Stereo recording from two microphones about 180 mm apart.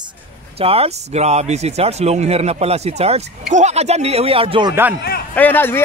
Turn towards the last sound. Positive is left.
turn(degrees=10)  # may be behind; listen again after turning